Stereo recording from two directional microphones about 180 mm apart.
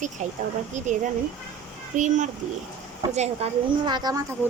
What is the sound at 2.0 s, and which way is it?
Speech, 45° right (ahead or behind).